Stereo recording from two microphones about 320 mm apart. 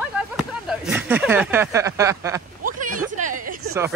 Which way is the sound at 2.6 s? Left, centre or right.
Right.